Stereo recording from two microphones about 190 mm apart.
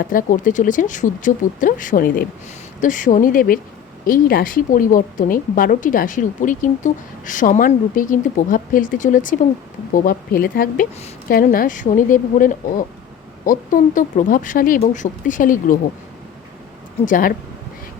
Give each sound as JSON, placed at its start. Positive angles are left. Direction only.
{"t": 0.0, "sound": "a woman's voice", "side_deg": 45}
{"t": 17.1, "sound": "a woman's voice", "side_deg": 45}